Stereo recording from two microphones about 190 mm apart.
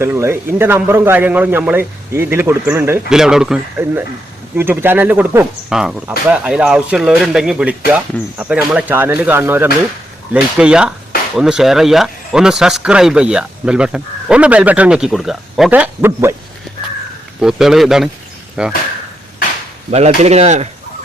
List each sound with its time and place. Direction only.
0.0 s a man's voice: 10° right (ahead or behind)
17.4 s a man's voice: centre (ahead or behind)
19.9 s speech: 35° right (ahead or behind)